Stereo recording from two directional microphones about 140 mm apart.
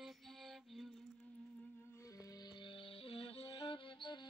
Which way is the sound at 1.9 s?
25° left (ahead or behind).